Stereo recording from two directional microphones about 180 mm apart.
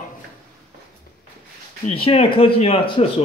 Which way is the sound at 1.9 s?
30° left (ahead or behind).